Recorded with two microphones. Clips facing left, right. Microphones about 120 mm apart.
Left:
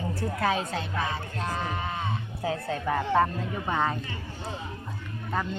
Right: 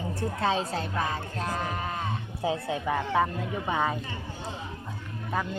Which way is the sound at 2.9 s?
5° right (ahead or behind).